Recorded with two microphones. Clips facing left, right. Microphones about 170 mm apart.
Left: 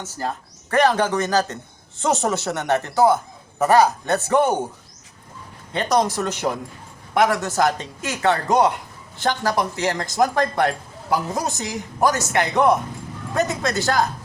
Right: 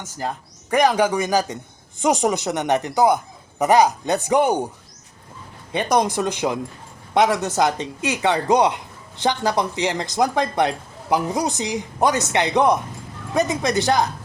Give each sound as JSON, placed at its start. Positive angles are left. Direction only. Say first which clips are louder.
{"t": 0.0, "sound": "speech", "louder": "even", "side_deg": -15}
{"t": 5.7, "sound": "speech", "louder": "right 1 dB", "side_deg": -15}